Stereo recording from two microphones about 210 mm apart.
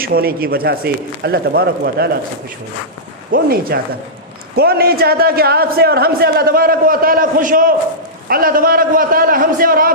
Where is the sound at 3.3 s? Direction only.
45° right (ahead or behind).